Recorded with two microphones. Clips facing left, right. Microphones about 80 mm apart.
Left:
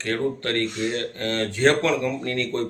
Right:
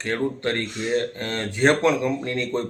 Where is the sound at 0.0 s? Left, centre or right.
Centre.